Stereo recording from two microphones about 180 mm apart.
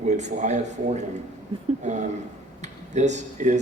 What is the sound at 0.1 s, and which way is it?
Speech, 40° right (ahead or behind).